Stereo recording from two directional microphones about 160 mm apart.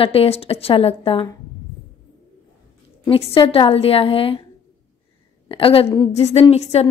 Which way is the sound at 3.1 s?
35° left (ahead or behind).